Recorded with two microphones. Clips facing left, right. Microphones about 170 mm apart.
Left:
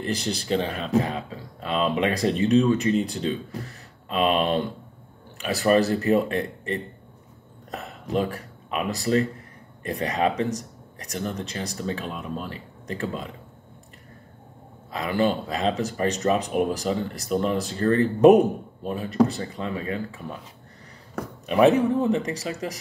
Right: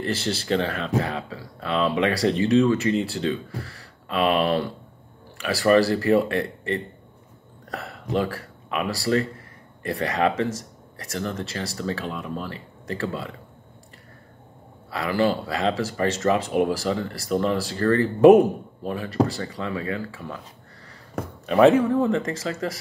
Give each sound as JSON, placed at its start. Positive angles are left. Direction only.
{"t": 0.0, "sound": "speech", "side_deg": 15}
{"t": 14.9, "sound": "speech", "side_deg": 20}
{"t": 21.5, "sound": "speech", "side_deg": 15}